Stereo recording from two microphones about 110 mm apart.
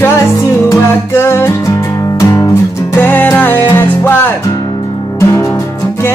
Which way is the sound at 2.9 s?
15° left (ahead or behind).